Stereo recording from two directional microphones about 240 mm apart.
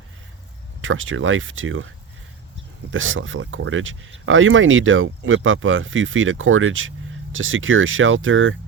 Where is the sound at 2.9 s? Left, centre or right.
Right.